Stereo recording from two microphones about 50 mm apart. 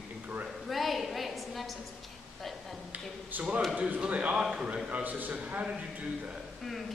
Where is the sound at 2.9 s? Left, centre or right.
Right.